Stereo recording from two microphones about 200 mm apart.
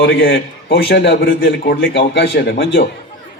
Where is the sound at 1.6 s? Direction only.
50° left (ahead or behind).